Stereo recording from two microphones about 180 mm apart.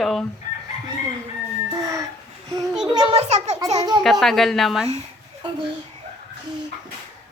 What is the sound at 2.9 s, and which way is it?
Speech, 35° right (ahead or behind).